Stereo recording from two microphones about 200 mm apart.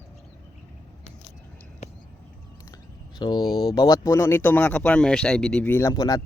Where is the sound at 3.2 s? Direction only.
20° left (ahead or behind).